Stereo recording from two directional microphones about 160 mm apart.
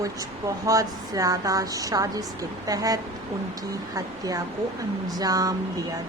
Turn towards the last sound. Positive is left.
turn(degrees=-25)  # may be behind; listen again after turning